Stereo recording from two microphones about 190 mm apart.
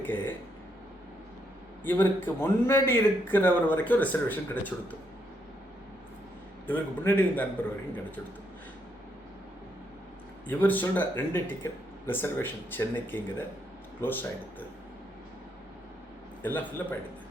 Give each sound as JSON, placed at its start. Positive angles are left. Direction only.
{"t": 0.0, "sound": "a man's voice", "side_deg": 10}
{"t": 1.8, "sound": "a man's voice", "side_deg": 10}
{"t": 6.7, "sound": "a man's voice", "side_deg": 10}
{"t": 10.4, "sound": "a man's voice", "side_deg": 10}
{"t": 16.4, "sound": "a man's voice", "side_deg": 10}